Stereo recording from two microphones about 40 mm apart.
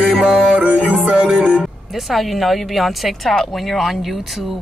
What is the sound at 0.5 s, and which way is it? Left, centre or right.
Music, right.